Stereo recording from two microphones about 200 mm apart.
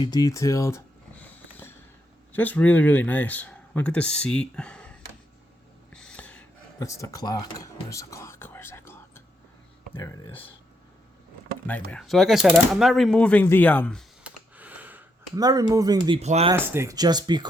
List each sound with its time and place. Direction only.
0.0 s a sound: 20° left (ahead or behind)
2.3 s speech: 10° left (ahead or behind)
5.9 s a sound: 5° left (ahead or behind)
6.7 s whispering: 15° left (ahead or behind)
9.9 s speech: 20° left (ahead or behind)
11.6 s speech: 5° left (ahead or behind)
14.3 s a sound: 5° right (ahead or behind)
15.4 s speech: 20° right (ahead or behind)
16.5 s speech: 15° right (ahead or behind)